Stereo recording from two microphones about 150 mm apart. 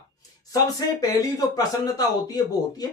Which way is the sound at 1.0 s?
25° left (ahead or behind).